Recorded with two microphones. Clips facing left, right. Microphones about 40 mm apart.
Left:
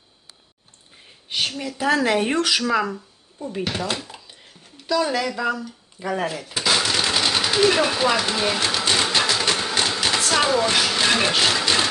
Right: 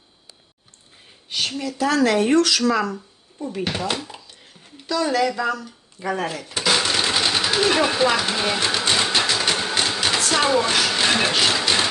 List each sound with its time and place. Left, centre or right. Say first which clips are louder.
1.6 s speech: right 2 dB; centre
3.6 s speech: right 1 dB; centre
5.6 s speech: right 1 dB; centre
6.3 s a sound: right 1 dB; centre